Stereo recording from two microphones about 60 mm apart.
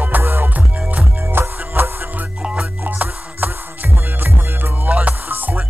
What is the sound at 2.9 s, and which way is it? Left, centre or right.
Music, right.